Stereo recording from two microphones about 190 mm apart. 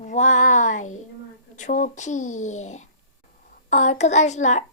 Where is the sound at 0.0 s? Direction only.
40° left (ahead or behind).